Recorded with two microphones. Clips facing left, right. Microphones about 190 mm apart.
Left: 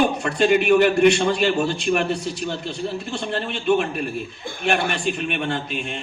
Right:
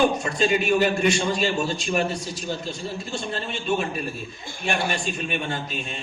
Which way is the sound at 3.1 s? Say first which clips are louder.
Left 3 dB; 65° left (ahead or behind).